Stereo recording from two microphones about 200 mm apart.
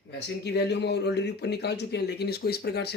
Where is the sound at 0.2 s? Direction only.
55° left (ahead or behind).